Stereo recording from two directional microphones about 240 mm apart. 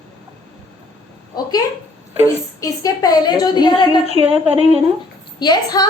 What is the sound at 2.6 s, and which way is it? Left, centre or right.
A woman's voice, centre.